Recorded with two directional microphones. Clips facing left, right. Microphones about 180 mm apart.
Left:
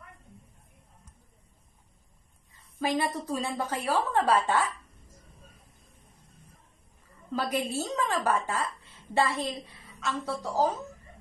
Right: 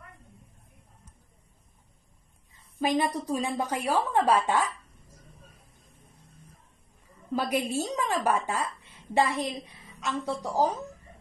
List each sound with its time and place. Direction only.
2.8 s a woman's voice: 20° right (ahead or behind)
7.3 s a woman's voice: 15° right (ahead or behind)